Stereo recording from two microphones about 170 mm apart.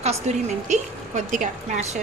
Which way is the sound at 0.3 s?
40° right (ahead or behind).